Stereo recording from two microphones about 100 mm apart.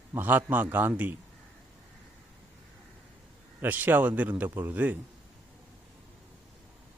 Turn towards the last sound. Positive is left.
turn(degrees=-15)  # may be behind; listen again after turning